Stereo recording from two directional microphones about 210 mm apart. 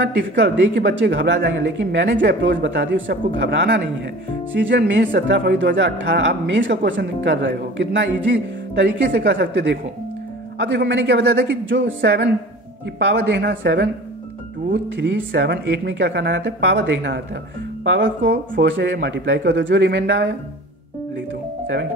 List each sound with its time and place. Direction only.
0.0 s speech: 55° right (ahead or behind)